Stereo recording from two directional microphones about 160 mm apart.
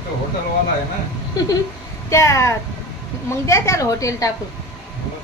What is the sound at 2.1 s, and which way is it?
A woman's voice, 20° left (ahead or behind).